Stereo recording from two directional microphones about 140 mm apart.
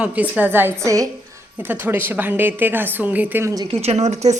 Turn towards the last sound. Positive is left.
turn(degrees=-55)  # may be behind; listen again after turning